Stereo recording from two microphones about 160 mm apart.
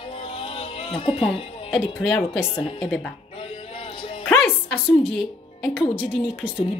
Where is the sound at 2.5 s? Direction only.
35° left (ahead or behind).